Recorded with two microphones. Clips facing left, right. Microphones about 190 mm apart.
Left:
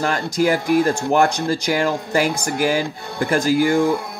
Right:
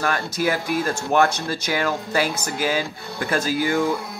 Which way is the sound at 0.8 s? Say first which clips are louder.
Left 3 dB; 15° left (ahead or behind).